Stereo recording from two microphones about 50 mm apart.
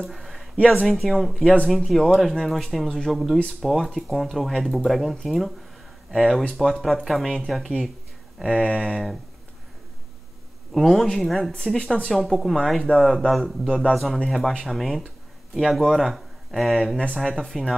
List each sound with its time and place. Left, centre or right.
0.0 s a sound: centre
0.8 s speech: centre
1.3 s speech: left
1.9 s speech: centre
8.5 s speech: centre
8.9 s speech: centre
10.7 s a man's voice: centre